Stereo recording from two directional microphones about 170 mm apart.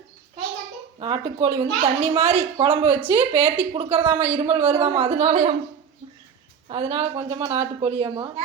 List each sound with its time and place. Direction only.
0.9 s speech: 30° right (ahead or behind)
6.7 s speech: 30° right (ahead or behind)